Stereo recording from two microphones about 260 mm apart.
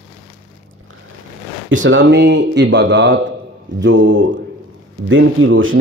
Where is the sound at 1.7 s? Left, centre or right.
Right.